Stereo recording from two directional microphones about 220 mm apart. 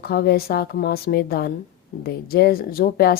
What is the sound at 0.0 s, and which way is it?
Speech, 45° left (ahead or behind).